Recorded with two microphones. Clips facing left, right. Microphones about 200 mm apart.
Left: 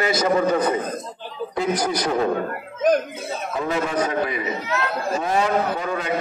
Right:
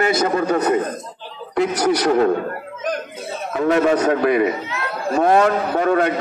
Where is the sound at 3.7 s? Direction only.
70° right (ahead or behind).